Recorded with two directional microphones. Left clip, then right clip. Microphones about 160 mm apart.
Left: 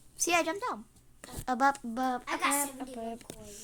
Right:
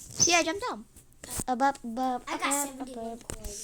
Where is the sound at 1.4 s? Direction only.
10° left (ahead or behind).